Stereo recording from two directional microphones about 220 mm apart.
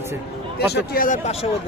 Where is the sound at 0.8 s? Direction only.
40° left (ahead or behind).